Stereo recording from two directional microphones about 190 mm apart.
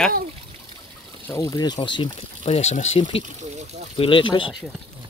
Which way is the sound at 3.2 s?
35° right (ahead or behind).